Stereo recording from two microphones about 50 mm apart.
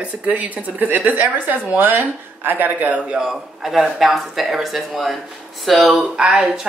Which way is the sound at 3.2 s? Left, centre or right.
Centre.